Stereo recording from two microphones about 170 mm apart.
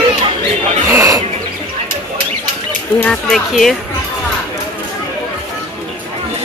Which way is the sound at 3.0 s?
5° left (ahead or behind).